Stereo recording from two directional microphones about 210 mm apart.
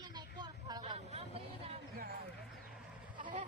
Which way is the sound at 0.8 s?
30° right (ahead or behind).